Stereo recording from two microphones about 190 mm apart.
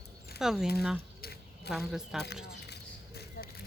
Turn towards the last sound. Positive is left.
turn(degrees=55)  # may be behind; listen again after turning